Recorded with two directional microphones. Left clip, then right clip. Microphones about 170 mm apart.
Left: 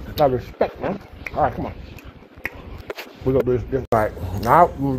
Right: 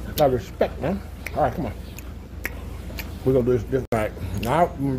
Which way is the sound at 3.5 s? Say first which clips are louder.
Even; 25° right (ahead or behind).